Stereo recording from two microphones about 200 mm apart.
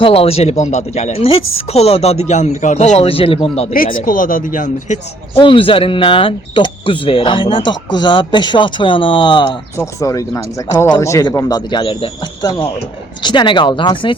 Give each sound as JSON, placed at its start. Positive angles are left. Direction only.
{"t": 0.0, "sound": "speech", "side_deg": 30}
{"t": 3.9, "sound": "speech", "side_deg": 45}
{"t": 5.3, "sound": "speech", "side_deg": 25}